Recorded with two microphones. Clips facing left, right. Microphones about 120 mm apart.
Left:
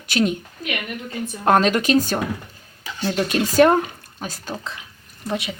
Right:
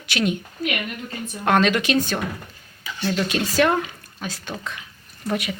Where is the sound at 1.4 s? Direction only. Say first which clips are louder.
Left 2 dB; 40° left (ahead or behind).